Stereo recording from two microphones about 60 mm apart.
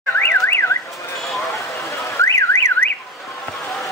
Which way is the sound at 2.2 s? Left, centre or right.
Left.